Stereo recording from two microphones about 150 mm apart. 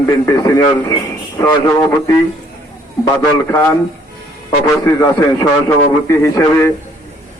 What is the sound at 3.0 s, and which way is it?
A man's voice, 20° left (ahead or behind).